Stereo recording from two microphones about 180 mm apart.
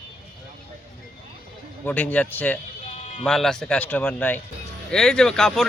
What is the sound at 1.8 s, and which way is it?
A man's voice, 10° left (ahead or behind).